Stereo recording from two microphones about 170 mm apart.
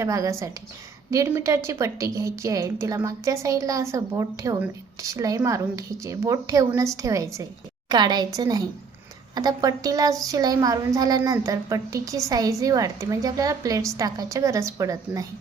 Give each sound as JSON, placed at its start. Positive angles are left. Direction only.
{"t": 0.0, "sound": "a woman's voice", "side_deg": -20}